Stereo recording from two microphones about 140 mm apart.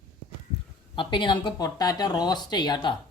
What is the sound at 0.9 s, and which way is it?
Speech, 35° left (ahead or behind).